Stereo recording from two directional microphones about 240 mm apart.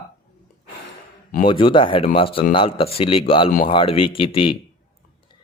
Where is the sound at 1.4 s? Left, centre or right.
Left.